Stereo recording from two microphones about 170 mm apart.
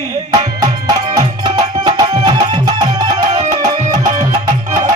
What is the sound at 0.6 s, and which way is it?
Music, 20° right (ahead or behind).